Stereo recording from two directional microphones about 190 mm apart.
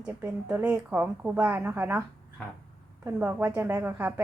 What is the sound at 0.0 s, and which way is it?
A woman's voice, 10° right (ahead or behind).